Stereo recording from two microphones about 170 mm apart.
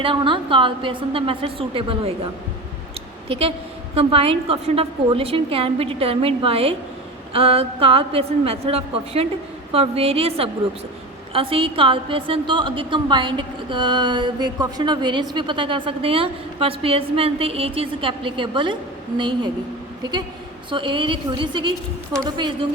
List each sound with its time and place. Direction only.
0.0 s a woman's voice: 30° right (ahead or behind)
3.2 s a woman's voice: 35° right (ahead or behind)
20.7 s a woman's voice: 30° right (ahead or behind)